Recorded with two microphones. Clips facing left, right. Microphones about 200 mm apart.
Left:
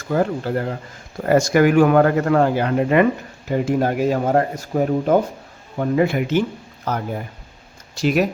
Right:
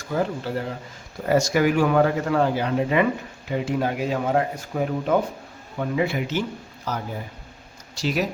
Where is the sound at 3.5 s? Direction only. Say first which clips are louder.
Left 5 dB; 45° left (ahead or behind).